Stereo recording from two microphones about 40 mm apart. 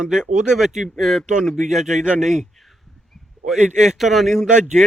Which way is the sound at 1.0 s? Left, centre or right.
Centre.